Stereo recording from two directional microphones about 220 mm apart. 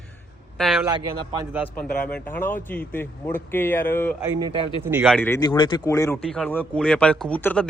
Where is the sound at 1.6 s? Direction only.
5° left (ahead or behind).